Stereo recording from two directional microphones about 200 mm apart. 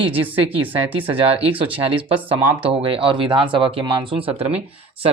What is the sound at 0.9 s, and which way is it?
Speech, 25° right (ahead or behind).